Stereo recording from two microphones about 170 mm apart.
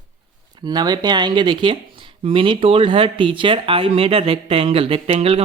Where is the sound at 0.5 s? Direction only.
25° right (ahead or behind).